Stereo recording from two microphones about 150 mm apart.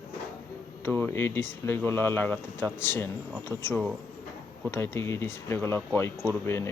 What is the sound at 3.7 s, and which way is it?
Speech, centre (ahead or behind).